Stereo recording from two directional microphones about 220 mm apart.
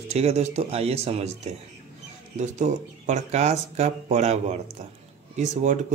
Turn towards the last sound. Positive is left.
turn(degrees=-35)  # may be behind; listen again after turning